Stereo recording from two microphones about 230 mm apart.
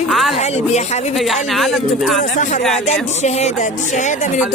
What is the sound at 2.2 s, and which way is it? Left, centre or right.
A woman's voice, left.